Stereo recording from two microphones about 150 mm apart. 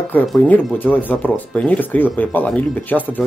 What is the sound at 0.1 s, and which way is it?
Speech, 10° left (ahead or behind).